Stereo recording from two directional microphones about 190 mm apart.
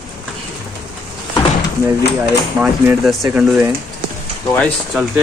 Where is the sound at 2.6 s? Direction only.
10° right (ahead or behind).